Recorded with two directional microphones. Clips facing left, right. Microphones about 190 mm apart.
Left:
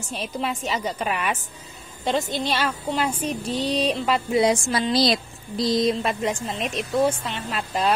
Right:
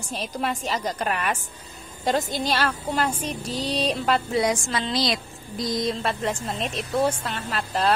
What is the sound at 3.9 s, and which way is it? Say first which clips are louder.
Speech: even; 5° left (ahead or behind).